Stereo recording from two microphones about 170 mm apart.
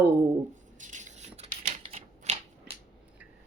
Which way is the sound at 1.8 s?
35° right (ahead or behind).